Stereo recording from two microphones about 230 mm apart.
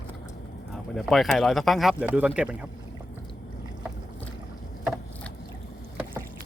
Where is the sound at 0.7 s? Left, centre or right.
Centre.